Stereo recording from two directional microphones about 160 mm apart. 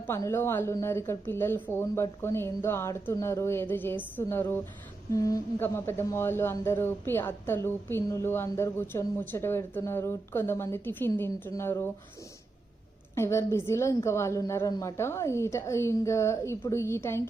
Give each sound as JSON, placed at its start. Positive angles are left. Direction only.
{"t": 0.1, "sound": "speech", "side_deg": 15}
{"t": 13.1, "sound": "speech", "side_deg": 15}